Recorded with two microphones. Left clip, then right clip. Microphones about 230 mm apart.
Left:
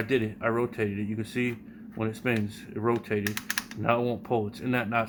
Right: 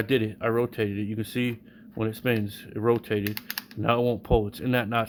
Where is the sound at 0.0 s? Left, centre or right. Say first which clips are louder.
Right 2 dB; right.